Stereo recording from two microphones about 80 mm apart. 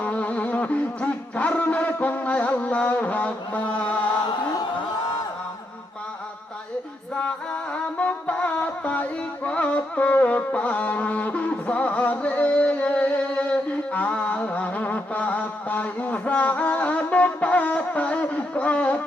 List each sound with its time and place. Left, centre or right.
0.0 s music: centre
7.2 s music: centre